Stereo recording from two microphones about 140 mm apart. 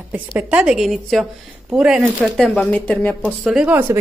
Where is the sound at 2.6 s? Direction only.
10° left (ahead or behind).